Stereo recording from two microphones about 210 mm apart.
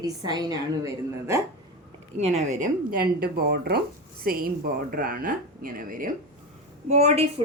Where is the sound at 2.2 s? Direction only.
30° right (ahead or behind).